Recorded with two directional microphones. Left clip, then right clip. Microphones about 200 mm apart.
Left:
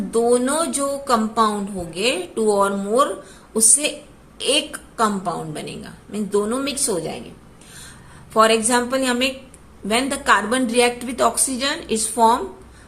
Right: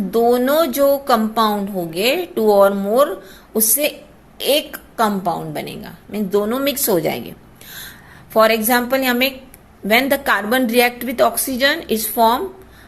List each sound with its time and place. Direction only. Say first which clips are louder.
0.1 s a woman's voice: right 3 dB; 20° right (ahead or behind); by 7.3 s 35° right (ahead or behind)
7.8 s a woman's voice: right 6 dB; 25° right (ahead or behind)